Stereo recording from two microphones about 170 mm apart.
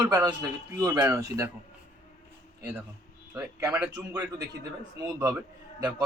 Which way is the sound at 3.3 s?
15° right (ahead or behind).